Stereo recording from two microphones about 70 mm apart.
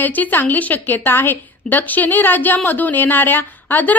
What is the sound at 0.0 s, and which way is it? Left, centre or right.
A woman's voice, left.